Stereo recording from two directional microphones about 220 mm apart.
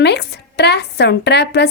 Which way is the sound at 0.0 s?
50° left (ahead or behind).